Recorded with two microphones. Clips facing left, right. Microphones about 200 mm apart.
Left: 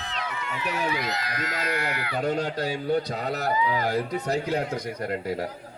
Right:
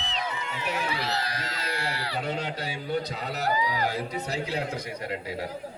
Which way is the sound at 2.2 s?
45° left (ahead or behind).